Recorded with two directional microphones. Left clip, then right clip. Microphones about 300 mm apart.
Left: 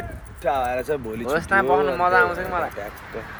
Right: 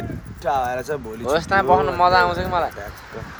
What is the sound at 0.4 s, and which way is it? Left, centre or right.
Speech, centre.